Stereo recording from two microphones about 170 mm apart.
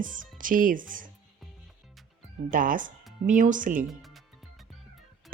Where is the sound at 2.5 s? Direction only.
55° right (ahead or behind).